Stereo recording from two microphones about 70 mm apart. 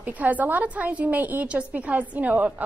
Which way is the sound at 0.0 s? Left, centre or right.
Right.